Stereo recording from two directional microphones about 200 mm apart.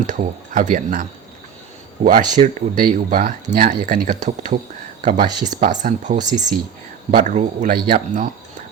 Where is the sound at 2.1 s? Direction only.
45° right (ahead or behind).